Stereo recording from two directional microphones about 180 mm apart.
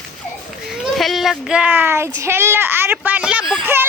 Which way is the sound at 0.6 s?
Centre (ahead or behind).